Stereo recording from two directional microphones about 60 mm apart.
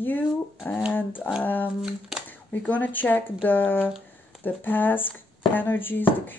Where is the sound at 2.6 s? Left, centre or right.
Left.